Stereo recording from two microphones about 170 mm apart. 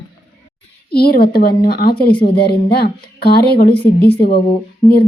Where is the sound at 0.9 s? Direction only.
65° left (ahead or behind).